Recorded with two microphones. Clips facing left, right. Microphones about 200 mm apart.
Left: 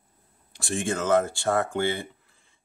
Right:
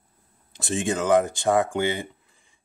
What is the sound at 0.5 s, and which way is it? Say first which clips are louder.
Speech: right 2 dB; 20° right (ahead or behind).